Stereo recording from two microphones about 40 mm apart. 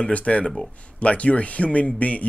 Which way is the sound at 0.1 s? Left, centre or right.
Left.